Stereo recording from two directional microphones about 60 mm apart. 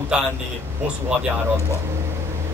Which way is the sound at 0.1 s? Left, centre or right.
Centre.